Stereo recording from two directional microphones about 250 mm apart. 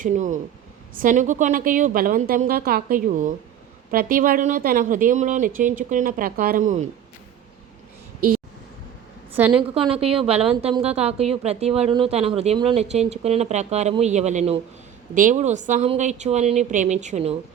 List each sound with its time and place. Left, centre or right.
0.0 s a woman's voice: right
9.3 s a woman's voice: centre
9.6 s a woman's voice: right